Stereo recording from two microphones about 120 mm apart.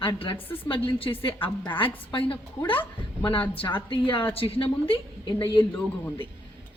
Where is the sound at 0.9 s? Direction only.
50° left (ahead or behind).